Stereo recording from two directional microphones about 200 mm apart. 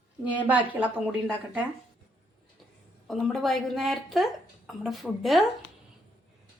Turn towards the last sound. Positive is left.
turn(degrees=0)  # may be behind; listen again after turning